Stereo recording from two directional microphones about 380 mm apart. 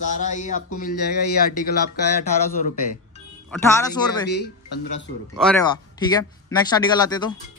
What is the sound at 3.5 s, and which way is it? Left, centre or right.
Speech, centre.